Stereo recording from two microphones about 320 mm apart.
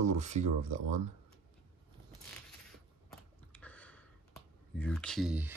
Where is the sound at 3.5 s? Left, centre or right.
Centre.